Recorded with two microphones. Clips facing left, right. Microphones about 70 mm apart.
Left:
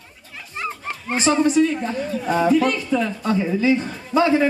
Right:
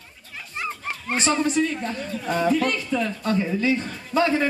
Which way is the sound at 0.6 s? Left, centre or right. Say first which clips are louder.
Left 2 dB; centre.